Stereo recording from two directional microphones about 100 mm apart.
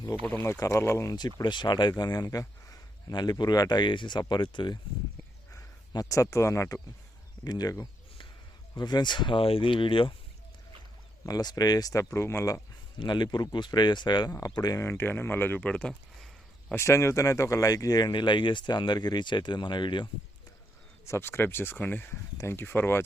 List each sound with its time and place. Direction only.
0.2 s speech: 15° left (ahead or behind)
0.4 s speech: 30° left (ahead or behind)
3.1 s speech: 45° left (ahead or behind)
5.5 s speech: 35° left (ahead or behind); by 10.2 s 60° left (ahead or behind)
11.3 s speech: 40° left (ahead or behind)
13.0 s speech: 45° left (ahead or behind)
14.3 s speech: 30° left (ahead or behind)
14.8 s speech: 20° left (ahead or behind); by 16.7 s 5° left (ahead or behind)
16.7 s speech: 25° left (ahead or behind); by 20.1 s 50° left (ahead or behind)
21.0 s speech: 25° left (ahead or behind)